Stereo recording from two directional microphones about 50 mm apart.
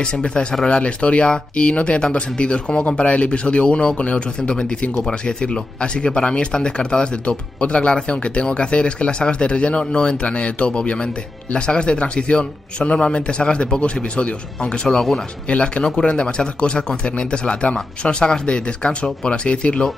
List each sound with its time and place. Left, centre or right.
0.0 s speech: centre